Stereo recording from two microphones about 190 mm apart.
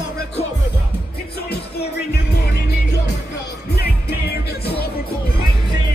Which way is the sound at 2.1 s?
55° left (ahead or behind).